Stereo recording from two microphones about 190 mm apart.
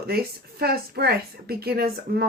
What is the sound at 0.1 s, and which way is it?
A woman's voice, 55° right (ahead or behind).